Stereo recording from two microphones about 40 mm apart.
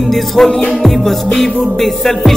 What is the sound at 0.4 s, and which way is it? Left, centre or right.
Music, centre.